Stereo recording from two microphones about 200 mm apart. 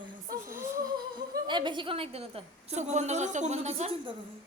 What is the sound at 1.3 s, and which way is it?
A woman's voice, 25° right (ahead or behind).